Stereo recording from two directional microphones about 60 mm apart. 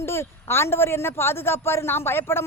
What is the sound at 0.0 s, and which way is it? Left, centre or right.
A man's voice, left.